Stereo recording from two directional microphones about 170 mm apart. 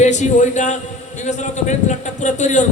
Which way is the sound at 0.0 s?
45° left (ahead or behind).